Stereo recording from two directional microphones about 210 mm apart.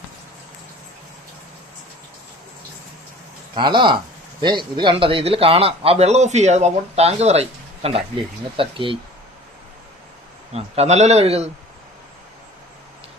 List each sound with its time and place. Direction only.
3.5 s a man's voice: 20° right (ahead or behind)
10.5 s speech: 30° right (ahead or behind)